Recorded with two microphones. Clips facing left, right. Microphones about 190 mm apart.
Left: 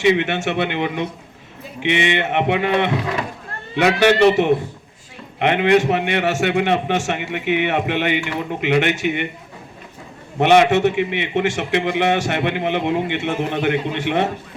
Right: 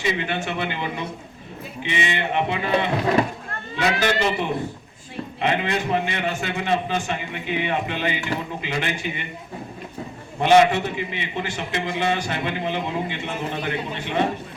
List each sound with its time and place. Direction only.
0.0 s a man's voice: 70° left (ahead or behind)
10.4 s a man's voice: 75° left (ahead or behind)